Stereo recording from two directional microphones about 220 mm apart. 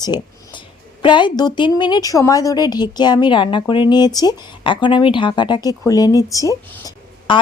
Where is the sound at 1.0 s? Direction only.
20° left (ahead or behind).